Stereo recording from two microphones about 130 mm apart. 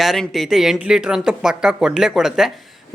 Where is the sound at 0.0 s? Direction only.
Centre (ahead or behind).